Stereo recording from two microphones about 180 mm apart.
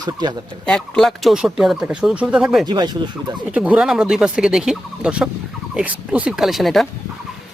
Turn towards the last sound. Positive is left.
turn(degrees=0)  # may be behind; listen again after turning